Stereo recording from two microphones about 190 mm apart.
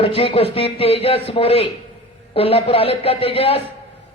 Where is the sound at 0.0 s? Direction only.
30° left (ahead or behind).